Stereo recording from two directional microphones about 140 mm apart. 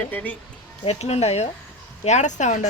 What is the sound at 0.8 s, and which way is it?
Speech, 45° left (ahead or behind).